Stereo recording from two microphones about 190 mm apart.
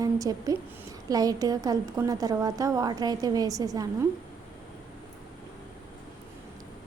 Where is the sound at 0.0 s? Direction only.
20° right (ahead or behind).